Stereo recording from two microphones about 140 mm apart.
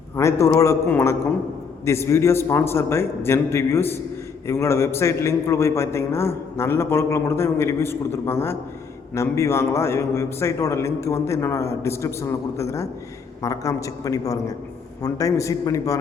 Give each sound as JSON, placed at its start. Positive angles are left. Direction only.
{"t": 0.2, "sound": "a man's voice", "side_deg": 20}